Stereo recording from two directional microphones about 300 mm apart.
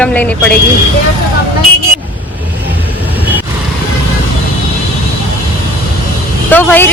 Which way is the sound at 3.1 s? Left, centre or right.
Centre.